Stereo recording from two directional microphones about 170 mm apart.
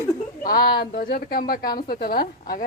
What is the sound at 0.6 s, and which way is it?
Speech, 25° left (ahead or behind).